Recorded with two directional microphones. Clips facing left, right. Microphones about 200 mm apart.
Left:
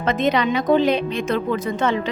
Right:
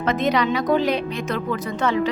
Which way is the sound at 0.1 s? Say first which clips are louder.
Left 1 dB; 25° left (ahead or behind).